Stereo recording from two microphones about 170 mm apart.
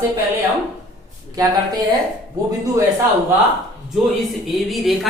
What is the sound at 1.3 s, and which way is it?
Speech, 20° right (ahead or behind).